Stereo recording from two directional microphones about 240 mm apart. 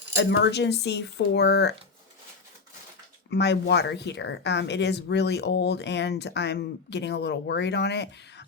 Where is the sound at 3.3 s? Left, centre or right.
Left.